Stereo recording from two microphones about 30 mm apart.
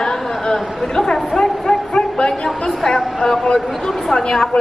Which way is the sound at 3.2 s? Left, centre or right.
Left.